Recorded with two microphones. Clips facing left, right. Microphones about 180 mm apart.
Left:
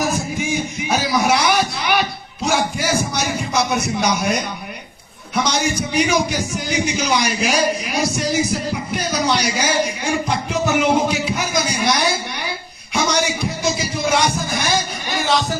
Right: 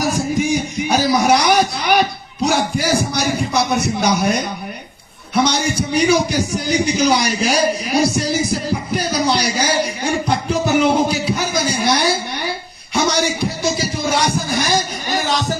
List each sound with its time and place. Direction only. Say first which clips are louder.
0.9 s music: right 3 dB; 40° right (ahead or behind)
2.5 s a sound: right 1 dB; 35° right (ahead or behind)
5.4 s a man's voice: right 3 dB; 30° right (ahead or behind)
9.0 s music: right 1 dB; 35° right (ahead or behind)